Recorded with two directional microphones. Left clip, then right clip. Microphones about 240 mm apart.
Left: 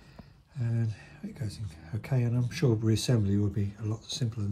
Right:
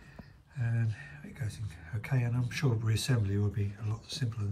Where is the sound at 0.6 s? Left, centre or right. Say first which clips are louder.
Left 2 dB; centre.